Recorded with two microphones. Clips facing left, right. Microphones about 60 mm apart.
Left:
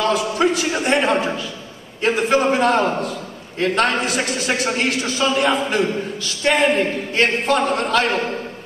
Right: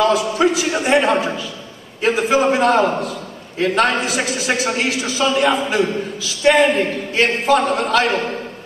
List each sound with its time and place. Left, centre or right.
0.0 s a man's voice: centre